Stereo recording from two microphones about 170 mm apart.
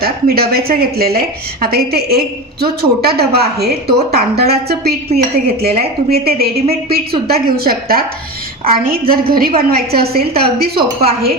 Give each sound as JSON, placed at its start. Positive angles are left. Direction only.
{"t": 0.0, "sound": "a woman's voice", "side_deg": -65}